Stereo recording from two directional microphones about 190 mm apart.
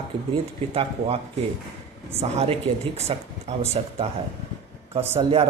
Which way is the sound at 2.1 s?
35° right (ahead or behind).